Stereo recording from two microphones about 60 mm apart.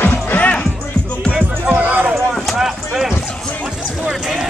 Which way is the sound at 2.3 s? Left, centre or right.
Centre.